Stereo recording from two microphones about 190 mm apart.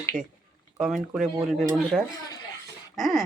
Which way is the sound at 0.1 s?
5° right (ahead or behind).